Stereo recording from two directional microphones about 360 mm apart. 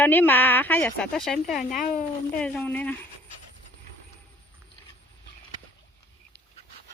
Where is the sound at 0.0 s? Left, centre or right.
Centre.